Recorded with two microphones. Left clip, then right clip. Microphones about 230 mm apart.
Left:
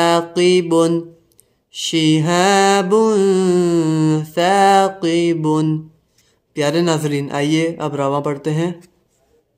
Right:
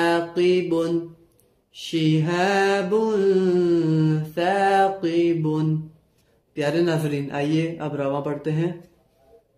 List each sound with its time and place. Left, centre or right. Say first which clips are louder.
0.0 s mantra: left 6 dB; left